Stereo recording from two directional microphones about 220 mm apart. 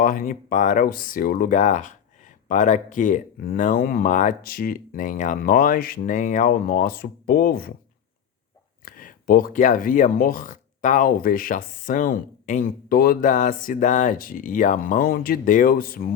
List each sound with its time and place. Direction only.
0.0 s speech: 40° left (ahead or behind)
8.8 s speech: 40° left (ahead or behind)